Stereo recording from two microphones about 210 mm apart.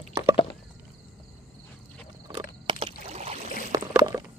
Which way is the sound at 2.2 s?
20° right (ahead or behind).